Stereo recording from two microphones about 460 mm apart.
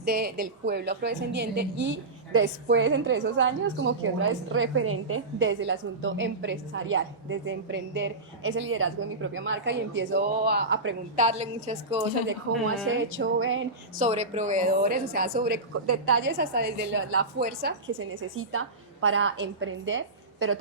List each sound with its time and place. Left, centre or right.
0.0 s a woman's voice: centre
12.5 s a woman's voice: right
14.0 s a woman's voice: centre